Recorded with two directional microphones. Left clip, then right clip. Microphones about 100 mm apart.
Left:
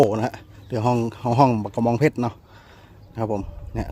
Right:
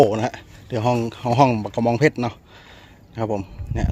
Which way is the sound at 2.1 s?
25° left (ahead or behind).